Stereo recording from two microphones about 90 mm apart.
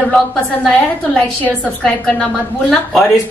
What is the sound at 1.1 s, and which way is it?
A woman's voice, 10° left (ahead or behind).